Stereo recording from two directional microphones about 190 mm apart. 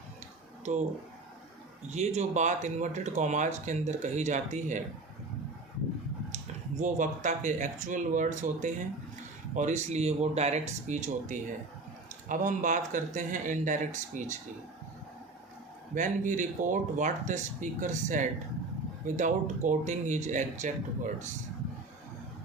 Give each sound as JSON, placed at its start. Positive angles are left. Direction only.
{"t": 0.6, "sound": "speech", "side_deg": -40}
{"t": 1.9, "sound": "speech", "side_deg": -35}
{"t": 6.3, "sound": "speech", "side_deg": -40}
{"t": 16.0, "sound": "speech", "side_deg": -40}